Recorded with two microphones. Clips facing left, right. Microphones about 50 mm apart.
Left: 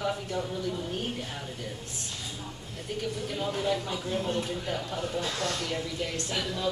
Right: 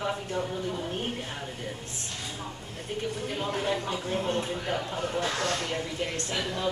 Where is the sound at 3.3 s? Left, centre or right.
Right.